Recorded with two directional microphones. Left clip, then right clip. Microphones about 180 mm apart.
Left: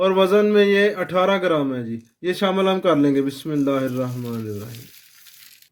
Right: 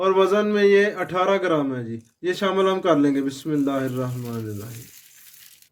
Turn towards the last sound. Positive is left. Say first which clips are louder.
# left 3 dB
turn(degrees=40)  # may be behind; listen again after turning